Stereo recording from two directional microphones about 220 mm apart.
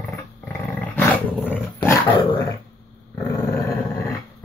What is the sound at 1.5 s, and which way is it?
Dog, 10° left (ahead or behind).